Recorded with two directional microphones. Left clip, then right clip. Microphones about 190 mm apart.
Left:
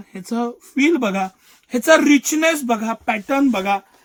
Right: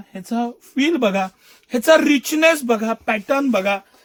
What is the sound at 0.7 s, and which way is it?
Speech, 30° right (ahead or behind).